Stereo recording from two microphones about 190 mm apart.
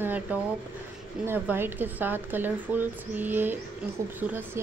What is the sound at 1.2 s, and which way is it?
A woman's voice, 10° right (ahead or behind).